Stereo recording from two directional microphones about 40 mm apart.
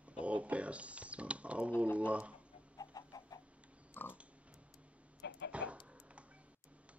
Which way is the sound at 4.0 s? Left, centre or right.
Left.